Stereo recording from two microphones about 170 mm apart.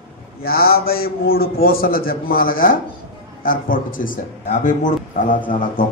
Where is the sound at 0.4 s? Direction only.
60° left (ahead or behind).